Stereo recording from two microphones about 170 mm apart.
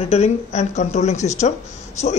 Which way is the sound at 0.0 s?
40° left (ahead or behind).